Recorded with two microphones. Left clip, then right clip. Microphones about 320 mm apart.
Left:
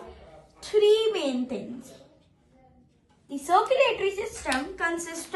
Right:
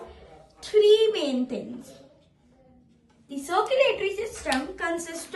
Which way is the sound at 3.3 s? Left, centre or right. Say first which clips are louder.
Left 2 dB; centre.